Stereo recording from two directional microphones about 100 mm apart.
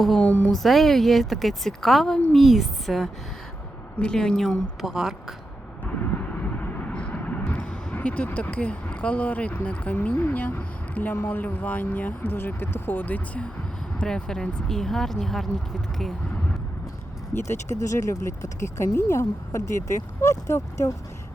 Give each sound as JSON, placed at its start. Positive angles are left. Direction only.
{"t": 0.0, "sound": "speech", "side_deg": 5}
{"t": 0.6, "sound": "a woman's voice", "side_deg": 0}
{"t": 5.8, "sound": "vehicle", "side_deg": 15}
{"t": 14.0, "sound": "a woman's voice", "side_deg": 5}
{"t": 17.3, "sound": "speech", "side_deg": 30}